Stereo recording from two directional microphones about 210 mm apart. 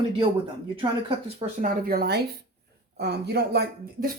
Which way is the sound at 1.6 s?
45° right (ahead or behind).